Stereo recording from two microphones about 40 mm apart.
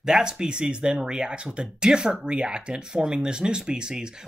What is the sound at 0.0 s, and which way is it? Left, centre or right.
Speech, centre.